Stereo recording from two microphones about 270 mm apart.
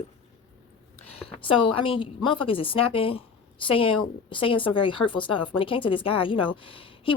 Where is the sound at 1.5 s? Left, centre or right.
Centre.